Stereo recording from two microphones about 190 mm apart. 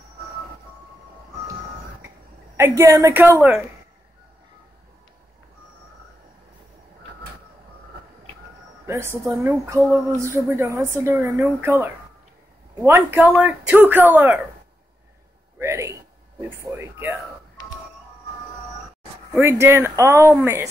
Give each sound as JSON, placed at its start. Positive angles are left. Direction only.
{"t": 2.5, "sound": "speech", "side_deg": -15}
{"t": 8.8, "sound": "speech", "side_deg": -15}
{"t": 15.6, "sound": "a sound", "side_deg": -15}
{"t": 19.4, "sound": "speech", "side_deg": -15}